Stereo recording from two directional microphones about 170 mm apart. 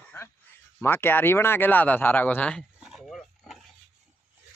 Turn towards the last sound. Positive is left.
turn(degrees=0)  # may be behind; listen again after turning